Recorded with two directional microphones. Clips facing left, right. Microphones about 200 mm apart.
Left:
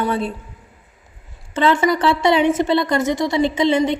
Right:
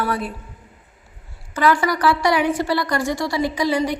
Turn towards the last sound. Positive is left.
turn(degrees=25)  # may be behind; listen again after turning